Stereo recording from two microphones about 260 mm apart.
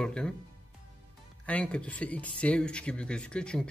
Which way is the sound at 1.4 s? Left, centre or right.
Centre.